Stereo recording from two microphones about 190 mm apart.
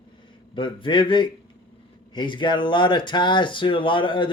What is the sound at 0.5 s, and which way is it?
Speech, 25° left (ahead or behind).